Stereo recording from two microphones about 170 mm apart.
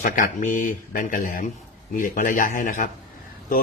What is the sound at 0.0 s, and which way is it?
Speech, 50° left (ahead or behind).